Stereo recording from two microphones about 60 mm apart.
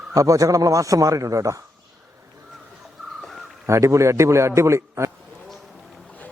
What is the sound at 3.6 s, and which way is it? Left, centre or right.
A man's voice, right.